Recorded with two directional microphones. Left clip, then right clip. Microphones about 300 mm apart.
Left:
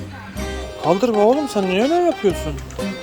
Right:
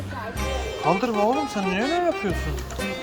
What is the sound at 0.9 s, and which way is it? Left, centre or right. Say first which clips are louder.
Speech: left 6 dB; left.